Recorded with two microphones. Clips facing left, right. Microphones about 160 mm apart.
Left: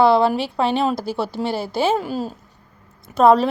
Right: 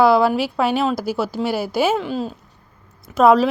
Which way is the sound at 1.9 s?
40° left (ahead or behind).